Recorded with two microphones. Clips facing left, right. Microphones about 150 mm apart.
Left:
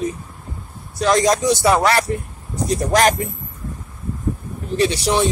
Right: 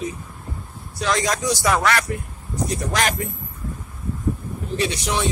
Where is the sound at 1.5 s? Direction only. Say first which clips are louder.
Left 2 dB; 25° left (ahead or behind).